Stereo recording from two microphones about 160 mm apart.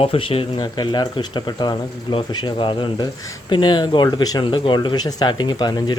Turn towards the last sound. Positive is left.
turn(degrees=25)  # may be behind; listen again after turning